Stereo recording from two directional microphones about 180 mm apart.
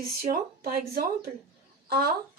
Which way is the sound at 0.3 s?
55° right (ahead or behind).